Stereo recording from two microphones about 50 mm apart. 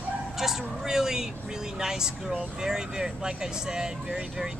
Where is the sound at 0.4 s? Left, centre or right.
Centre.